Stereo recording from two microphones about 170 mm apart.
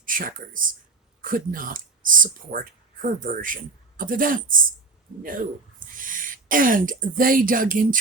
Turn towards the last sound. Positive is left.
turn(degrees=-55)  # may be behind; listen again after turning